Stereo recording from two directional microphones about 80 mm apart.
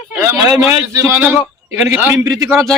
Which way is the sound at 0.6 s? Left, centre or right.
Right.